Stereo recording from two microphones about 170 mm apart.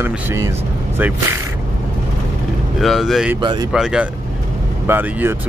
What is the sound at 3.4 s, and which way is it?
Speech, 30° right (ahead or behind).